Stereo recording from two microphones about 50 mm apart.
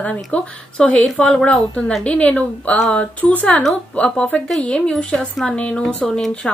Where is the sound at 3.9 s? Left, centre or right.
Centre.